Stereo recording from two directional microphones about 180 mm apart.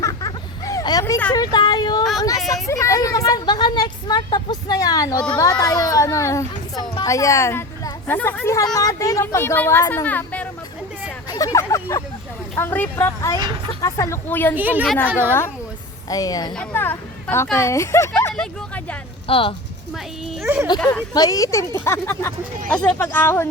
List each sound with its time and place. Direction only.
0.0 s vehicle: 20° left (ahead or behind)
1.3 s a child's voice: 20° left (ahead or behind)
11.3 s speech: 20° left (ahead or behind)
14.5 s a woman's voice: 10° right (ahead or behind)
16.0 s speech: 20° left (ahead or behind)
19.3 s speech: 30° left (ahead or behind)
20.4 s a woman's voice: 15° right (ahead or behind)
20.7 s speech: 5° left (ahead or behind)
21.1 s speech: 20° left (ahead or behind)